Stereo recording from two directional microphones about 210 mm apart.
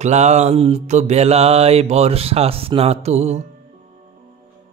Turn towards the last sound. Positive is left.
turn(degrees=-30)  # may be behind; listen again after turning